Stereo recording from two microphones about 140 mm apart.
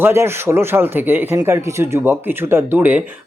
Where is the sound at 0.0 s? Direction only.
15° right (ahead or behind).